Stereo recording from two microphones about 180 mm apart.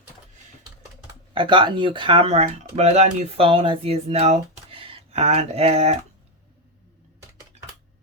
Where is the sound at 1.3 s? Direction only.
30° right (ahead or behind).